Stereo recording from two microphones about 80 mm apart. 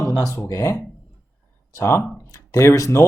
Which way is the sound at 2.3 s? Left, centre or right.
Left.